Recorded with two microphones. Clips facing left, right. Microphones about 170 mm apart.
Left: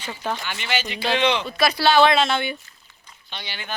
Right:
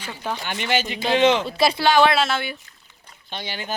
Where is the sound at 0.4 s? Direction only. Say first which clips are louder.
Right 4 dB; 50° right (ahead or behind).